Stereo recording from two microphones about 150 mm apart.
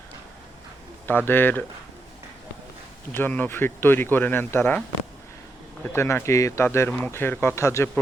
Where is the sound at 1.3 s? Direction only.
15° left (ahead or behind).